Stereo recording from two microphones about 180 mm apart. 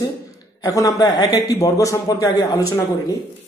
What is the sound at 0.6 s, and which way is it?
A man's voice, 20° left (ahead or behind).